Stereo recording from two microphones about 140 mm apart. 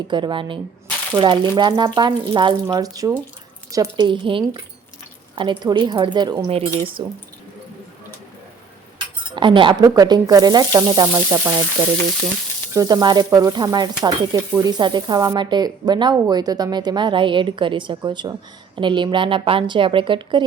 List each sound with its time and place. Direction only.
0.1 s speech: 35° right (ahead or behind)
6.5 s speech: 45° right (ahead or behind)
9.3 s speech: 35° right (ahead or behind)
12.7 s speech: 30° right (ahead or behind)